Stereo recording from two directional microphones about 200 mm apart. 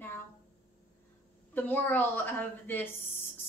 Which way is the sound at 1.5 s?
10° left (ahead or behind).